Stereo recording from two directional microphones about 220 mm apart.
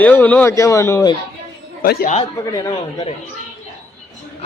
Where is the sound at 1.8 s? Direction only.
35° left (ahead or behind).